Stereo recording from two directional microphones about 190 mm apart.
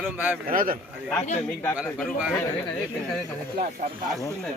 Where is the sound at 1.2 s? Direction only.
35° left (ahead or behind).